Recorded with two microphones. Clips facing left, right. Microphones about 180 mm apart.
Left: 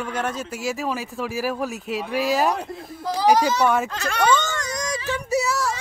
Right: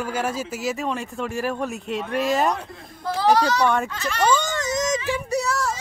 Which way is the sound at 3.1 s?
15° left (ahead or behind).